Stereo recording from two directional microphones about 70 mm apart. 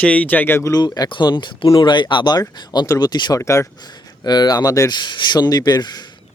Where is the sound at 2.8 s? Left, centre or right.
Left.